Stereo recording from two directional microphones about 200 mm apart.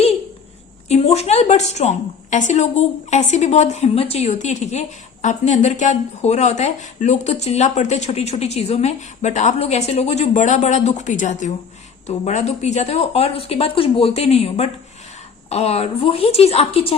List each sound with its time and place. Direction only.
0.9 s a woman's voice: 30° left (ahead or behind)